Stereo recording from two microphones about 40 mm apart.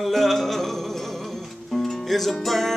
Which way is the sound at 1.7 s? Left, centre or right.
Centre.